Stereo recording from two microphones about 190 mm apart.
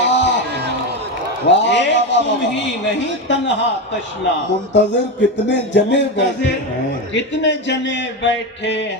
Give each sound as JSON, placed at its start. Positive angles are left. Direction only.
{"t": 0.0, "sound": "music", "side_deg": 70}
{"t": 1.5, "sound": "a man's voice", "side_deg": 70}
{"t": 4.7, "sound": "a man's voice", "side_deg": 65}